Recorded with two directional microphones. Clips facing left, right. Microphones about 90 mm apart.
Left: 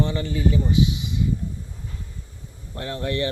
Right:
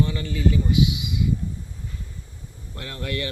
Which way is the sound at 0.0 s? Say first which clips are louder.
Left 1 dB; 25° left (ahead or behind).